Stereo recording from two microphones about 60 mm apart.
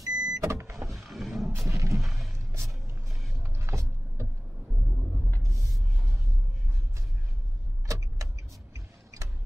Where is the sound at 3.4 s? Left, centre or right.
Right.